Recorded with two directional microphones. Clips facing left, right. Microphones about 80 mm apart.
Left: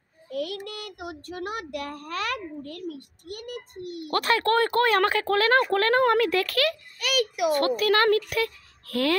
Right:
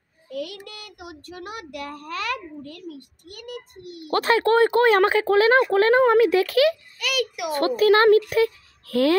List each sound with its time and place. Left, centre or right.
0.3 s child singing: left
4.1 s speech: right
7.0 s a sound: left
7.5 s speech: right